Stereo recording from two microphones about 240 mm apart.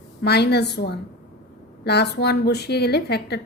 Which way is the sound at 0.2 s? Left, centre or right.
Left.